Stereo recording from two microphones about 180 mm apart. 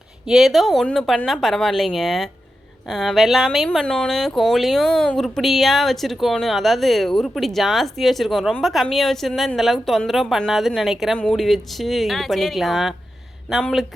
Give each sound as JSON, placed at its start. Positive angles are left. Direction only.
{"t": 0.3, "sound": "speech", "side_deg": 0}